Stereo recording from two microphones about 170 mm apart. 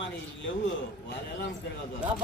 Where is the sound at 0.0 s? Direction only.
90° left.